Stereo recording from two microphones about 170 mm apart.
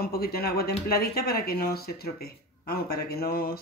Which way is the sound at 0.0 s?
65° left (ahead or behind).